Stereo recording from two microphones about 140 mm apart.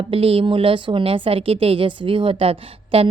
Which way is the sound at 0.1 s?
40° right (ahead or behind).